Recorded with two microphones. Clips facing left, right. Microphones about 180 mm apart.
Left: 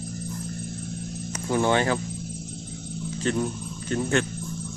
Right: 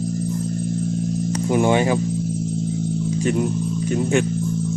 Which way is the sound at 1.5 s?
15° right (ahead or behind).